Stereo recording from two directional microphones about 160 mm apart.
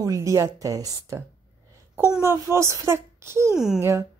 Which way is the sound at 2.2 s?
15° right (ahead or behind).